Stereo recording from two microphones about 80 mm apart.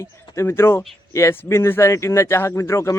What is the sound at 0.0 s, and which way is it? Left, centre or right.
Speech, left.